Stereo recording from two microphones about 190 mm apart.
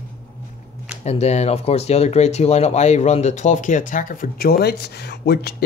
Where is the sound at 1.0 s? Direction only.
35° left (ahead or behind).